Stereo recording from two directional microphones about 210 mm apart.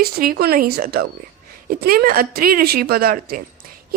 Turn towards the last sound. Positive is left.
turn(degrees=-45)  # may be behind; listen again after turning